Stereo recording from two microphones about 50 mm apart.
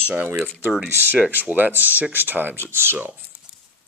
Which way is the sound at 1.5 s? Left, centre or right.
Right.